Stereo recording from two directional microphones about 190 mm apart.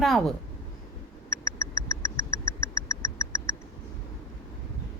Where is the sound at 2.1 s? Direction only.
15° left (ahead or behind).